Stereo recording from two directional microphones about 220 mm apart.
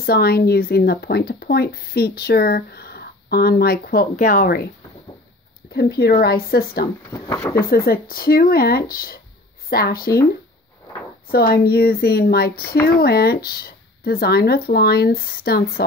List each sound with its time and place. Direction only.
0.0 s speech: 45° left (ahead or behind)
5.7 s speech: 45° left (ahead or behind)
7.1 s speech: 10° left (ahead or behind)
7.7 s speech: 45° left (ahead or behind)
11.2 s speech: 45° left (ahead or behind)